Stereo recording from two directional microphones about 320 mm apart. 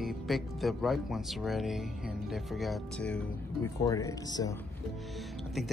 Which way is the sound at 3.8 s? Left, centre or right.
Centre.